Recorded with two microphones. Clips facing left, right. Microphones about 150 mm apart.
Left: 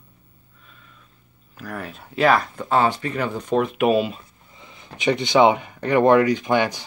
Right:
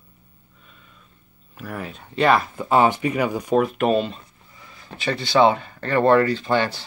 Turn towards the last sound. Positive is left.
turn(degrees=15)  # may be behind; listen again after turning